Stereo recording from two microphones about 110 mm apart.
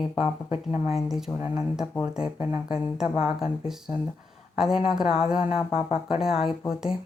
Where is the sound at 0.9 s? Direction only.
Centre (ahead or behind).